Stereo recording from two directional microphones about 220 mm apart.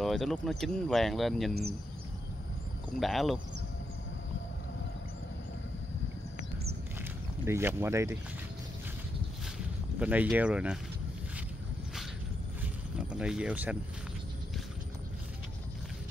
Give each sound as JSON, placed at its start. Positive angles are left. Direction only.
{"t": 0.0, "sound": "speech", "side_deg": 0}
{"t": 3.0, "sound": "speech", "side_deg": 0}
{"t": 7.4, "sound": "speech", "side_deg": -10}
{"t": 9.9, "sound": "speech", "side_deg": -5}
{"t": 12.9, "sound": "speech", "side_deg": -5}